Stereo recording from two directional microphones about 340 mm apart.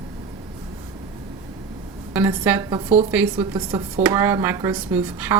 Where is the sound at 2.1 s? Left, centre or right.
Centre.